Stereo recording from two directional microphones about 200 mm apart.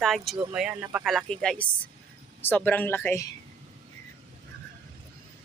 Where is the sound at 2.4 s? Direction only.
10° left (ahead or behind).